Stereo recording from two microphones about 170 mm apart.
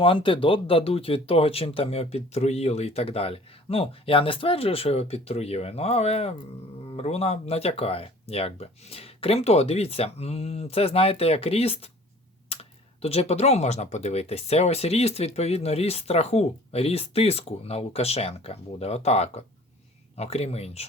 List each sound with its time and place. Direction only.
0.0 s speech: 30° left (ahead or behind)
13.0 s speech: 35° left (ahead or behind)